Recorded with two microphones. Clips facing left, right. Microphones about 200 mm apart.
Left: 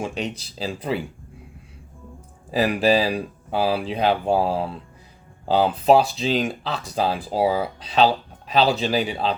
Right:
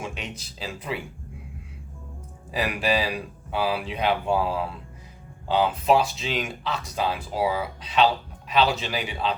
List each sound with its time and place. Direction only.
0.0 s speech: 35° left (ahead or behind)
2.5 s speech: 35° left (ahead or behind)